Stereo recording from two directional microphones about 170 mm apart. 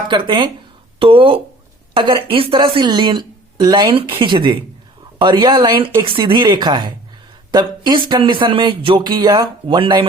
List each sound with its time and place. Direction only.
0.1 s a woman's voice: 30° right (ahead or behind)